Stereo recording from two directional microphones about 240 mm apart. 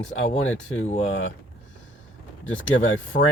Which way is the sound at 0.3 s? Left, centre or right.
Left.